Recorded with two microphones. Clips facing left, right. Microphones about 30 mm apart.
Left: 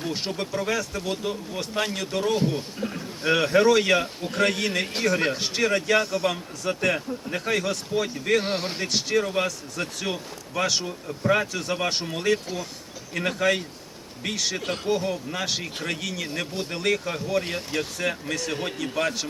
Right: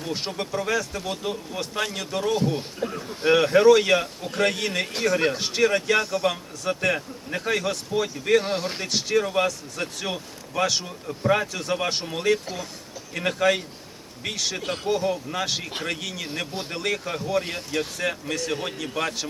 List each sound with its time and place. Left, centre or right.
0.0 s speech: centre
8.4 s speech: left
8.8 s speech: centre